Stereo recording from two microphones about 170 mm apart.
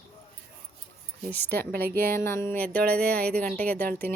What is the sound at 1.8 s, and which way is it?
Speech, 60° right (ahead or behind).